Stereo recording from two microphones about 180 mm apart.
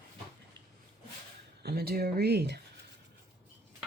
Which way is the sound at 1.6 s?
60° right (ahead or behind).